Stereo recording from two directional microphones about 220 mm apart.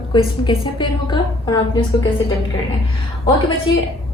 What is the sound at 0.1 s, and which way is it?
A woman's voice, 20° left (ahead or behind).